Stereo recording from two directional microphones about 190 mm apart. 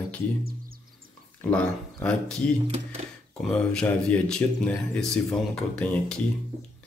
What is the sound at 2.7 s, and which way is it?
Speech, 35° right (ahead or behind).